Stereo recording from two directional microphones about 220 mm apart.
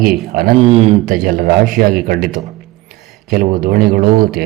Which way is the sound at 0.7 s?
30° right (ahead or behind).